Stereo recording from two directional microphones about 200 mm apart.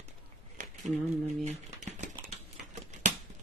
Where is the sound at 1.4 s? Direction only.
35° right (ahead or behind).